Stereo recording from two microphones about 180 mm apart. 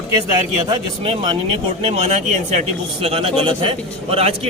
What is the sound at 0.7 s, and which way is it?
A man's voice, 30° right (ahead or behind).